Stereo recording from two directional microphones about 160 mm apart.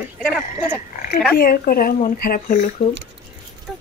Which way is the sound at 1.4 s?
65° left (ahead or behind).